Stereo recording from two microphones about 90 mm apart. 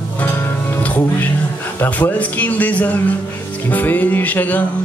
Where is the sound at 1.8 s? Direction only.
20° left (ahead or behind).